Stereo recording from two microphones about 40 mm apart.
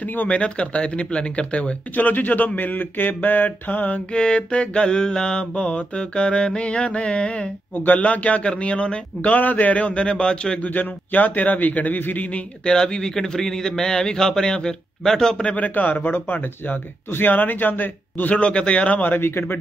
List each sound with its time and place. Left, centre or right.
0.0 s speech: left
0.3 s mantra: left
2.0 s speech: left
4.1 s mantra: left
7.7 s speech: left
8.0 s a man's voice: left
9.3 s mantra: left
10.6 s speech: left
12.6 s speech: centre
15.5 s speech: left
18.3 s a man's voice: left
19.0 s speech: left